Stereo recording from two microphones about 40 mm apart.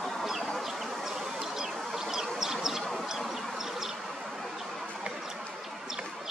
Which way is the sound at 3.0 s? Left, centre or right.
Centre.